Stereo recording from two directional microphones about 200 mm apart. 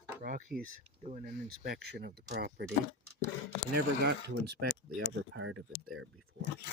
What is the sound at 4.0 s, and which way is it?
Speech, 55° right (ahead or behind).